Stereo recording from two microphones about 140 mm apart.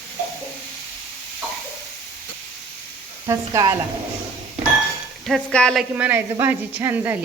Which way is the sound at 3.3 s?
20° right (ahead or behind).